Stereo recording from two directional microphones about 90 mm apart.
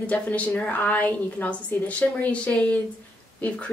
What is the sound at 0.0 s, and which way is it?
A woman's voice, 15° left (ahead or behind).